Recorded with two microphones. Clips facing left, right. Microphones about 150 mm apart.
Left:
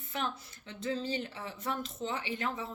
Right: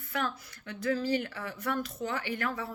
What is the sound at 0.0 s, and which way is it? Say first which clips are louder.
Speech: right 3 dB; 25° left (ahead or behind).